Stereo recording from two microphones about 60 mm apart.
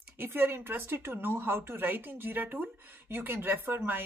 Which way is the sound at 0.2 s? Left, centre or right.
Right.